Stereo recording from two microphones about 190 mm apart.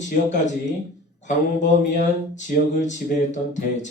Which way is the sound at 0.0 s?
40° left (ahead or behind).